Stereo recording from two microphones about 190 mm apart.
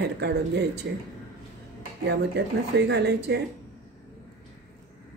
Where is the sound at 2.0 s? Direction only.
65° right (ahead or behind).